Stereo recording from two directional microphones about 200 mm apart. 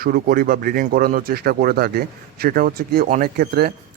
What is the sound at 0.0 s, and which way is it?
Speech, 45° right (ahead or behind).